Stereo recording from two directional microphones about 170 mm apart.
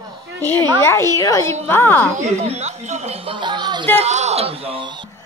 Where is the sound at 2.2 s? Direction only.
40° right (ahead or behind); by 3.8 s 25° right (ahead or behind).